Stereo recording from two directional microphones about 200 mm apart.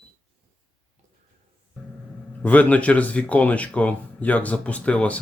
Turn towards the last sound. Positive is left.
turn(degrees=5)  # may be behind; listen again after turning